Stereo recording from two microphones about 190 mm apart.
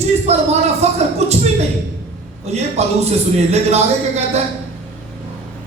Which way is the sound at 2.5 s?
35° right (ahead or behind).